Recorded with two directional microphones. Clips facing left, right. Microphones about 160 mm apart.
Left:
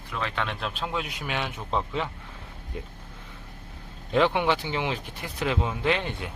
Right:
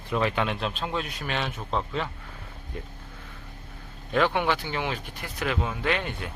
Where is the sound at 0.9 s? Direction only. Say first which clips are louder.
Right 1 dB; 15° left (ahead or behind).